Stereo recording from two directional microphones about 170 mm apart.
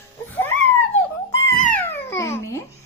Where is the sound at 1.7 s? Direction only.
10° left (ahead or behind).